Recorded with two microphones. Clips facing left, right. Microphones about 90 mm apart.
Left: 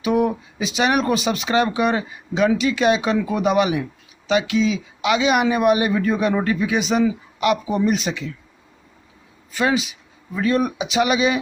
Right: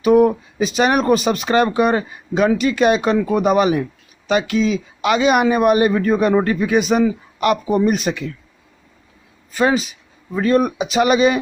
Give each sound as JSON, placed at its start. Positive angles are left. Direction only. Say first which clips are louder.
{"t": 0.0, "sound": "a man's voice", "louder": "right 7 dB", "side_deg": -45}
{"t": 9.5, "sound": "speech", "louder": "right 3 dB", "side_deg": -40}